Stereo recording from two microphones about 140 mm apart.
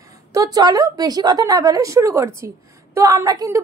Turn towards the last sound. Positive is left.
turn(degrees=-25)  # may be behind; listen again after turning